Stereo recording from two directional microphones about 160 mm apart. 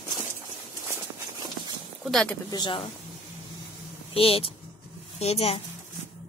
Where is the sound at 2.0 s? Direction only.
5° left (ahead or behind).